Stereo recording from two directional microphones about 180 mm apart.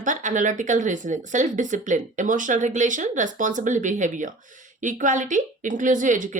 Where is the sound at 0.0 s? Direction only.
45° right (ahead or behind).